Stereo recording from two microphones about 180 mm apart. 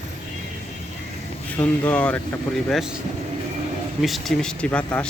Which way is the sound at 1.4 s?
10° left (ahead or behind).